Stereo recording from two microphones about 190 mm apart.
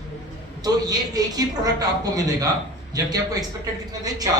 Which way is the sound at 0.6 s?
20° right (ahead or behind).